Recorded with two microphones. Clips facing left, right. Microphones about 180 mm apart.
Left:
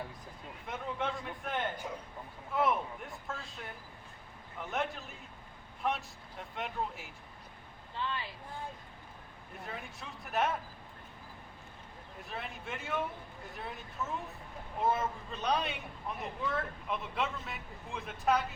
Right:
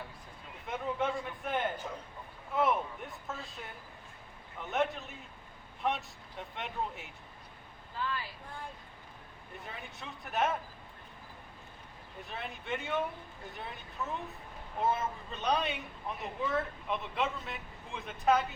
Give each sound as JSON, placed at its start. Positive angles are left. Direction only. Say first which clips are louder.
{"t": 0.7, "sound": "a man's voice", "louder": "right 3 dB", "side_deg": 0}
{"t": 2.6, "sound": "a sound", "louder": "right 1 dB", "side_deg": 0}
{"t": 4.6, "sound": "a man's voice", "louder": "right 4 dB", "side_deg": 0}
{"t": 7.9, "sound": "speech", "louder": "right 1 dB", "side_deg": 25}
{"t": 9.6, "sound": "a man's voice", "louder": "left 2 dB", "side_deg": 0}
{"t": 12.3, "sound": "a man's voice", "louder": "right 3 dB", "side_deg": 0}
{"t": 15.3, "sound": "a man's voice", "louder": "right 2 dB", "side_deg": 0}